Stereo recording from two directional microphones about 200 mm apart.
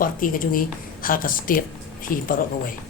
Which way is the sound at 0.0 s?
45° left (ahead or behind).